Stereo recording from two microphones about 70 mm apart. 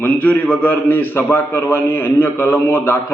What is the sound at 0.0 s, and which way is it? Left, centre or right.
A man's voice, left.